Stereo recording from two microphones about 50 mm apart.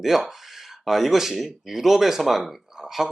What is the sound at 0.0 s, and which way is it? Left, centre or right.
Speech, centre.